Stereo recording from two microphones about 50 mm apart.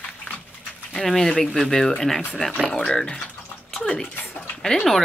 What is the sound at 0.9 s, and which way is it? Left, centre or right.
Speech, centre.